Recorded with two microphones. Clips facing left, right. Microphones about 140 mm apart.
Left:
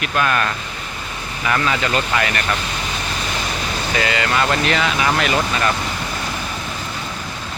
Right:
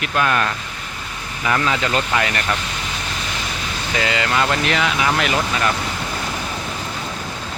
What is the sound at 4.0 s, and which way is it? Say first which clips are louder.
Speech: even; 20° right (ahead or behind).